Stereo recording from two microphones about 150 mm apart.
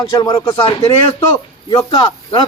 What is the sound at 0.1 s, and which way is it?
A man's voice, 30° left (ahead or behind).